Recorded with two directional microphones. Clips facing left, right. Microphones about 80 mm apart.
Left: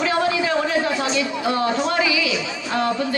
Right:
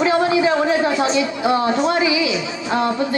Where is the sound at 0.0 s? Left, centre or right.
Right.